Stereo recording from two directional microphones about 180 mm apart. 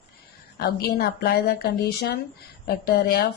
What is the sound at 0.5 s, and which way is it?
A woman's voice, 60° left (ahead or behind).